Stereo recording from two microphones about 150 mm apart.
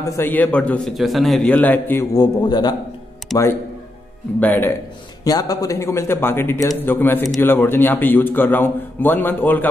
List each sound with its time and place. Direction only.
0.0 s a man's voice: 20° left (ahead or behind)
2.1 s speech: 30° left (ahead or behind)
3.3 s a man's voice: centre (ahead or behind)
4.4 s a man's voice: 10° left (ahead or behind)
5.2 s a man's voice: 25° left (ahead or behind)